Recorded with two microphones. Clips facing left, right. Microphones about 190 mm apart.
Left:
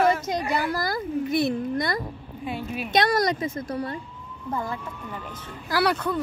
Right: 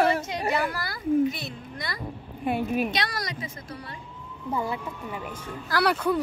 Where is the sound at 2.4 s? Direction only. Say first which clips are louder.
Right 5 dB; 50° right (ahead or behind).